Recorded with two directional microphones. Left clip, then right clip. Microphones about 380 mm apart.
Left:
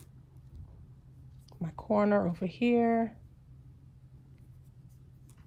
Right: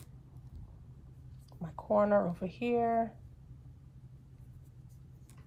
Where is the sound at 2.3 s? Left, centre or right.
Left.